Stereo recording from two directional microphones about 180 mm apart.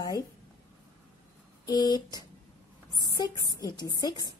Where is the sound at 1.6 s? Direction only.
20° left (ahead or behind).